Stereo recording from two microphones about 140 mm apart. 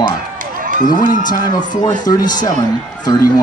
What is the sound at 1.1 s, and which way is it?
Speech, 70° left (ahead or behind).